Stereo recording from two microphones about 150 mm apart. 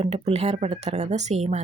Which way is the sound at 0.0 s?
45° right (ahead or behind).